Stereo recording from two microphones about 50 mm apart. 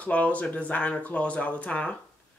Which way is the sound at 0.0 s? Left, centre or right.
Left.